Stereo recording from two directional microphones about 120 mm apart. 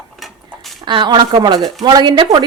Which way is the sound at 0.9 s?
40° right (ahead or behind).